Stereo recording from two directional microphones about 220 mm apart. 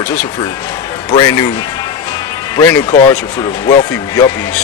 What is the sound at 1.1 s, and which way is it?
Speech, 20° left (ahead or behind).